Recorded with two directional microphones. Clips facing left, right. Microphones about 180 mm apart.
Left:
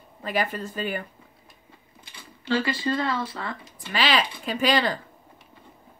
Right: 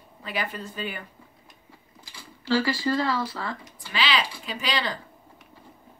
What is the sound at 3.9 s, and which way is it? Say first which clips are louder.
Speech: left 3 dB; 50° left (ahead or behind).